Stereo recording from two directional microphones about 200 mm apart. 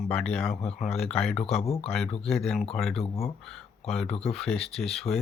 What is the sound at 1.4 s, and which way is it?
Speech, 30° left (ahead or behind).